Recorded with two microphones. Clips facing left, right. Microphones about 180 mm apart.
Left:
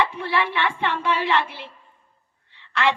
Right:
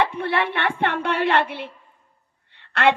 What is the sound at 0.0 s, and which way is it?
A woman's voice, 60° right (ahead or behind).